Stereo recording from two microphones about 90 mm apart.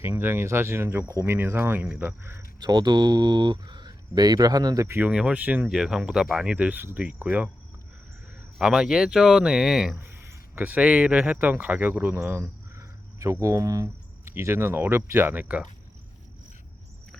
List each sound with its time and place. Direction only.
0.0 s speech: 25° right (ahead or behind)
1.8 s speech: 15° right (ahead or behind)
2.6 s speech: 55° right (ahead or behind)
4.9 s speech: 10° right (ahead or behind)
5.7 s speech: 5° right (ahead or behind)
8.5 s speech: 5° right (ahead or behind)
10.0 s speech: 30° right (ahead or behind)